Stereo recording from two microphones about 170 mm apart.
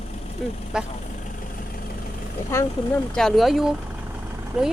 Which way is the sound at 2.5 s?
15° left (ahead or behind).